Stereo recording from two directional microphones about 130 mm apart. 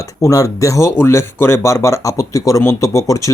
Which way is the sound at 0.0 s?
25° left (ahead or behind).